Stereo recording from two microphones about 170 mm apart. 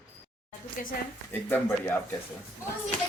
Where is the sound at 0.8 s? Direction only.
50° left (ahead or behind).